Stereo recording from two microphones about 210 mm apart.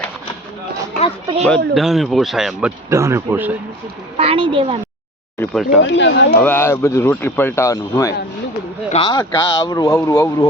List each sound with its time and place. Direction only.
1.5 s speech: centre (ahead or behind)
4.2 s a woman's voice: 25° right (ahead or behind)
5.4 s speech: centre (ahead or behind)
5.8 s speech: 60° left (ahead or behind)
6.3 s speech: 10° left (ahead or behind)
8.9 s speech: 25° left (ahead or behind)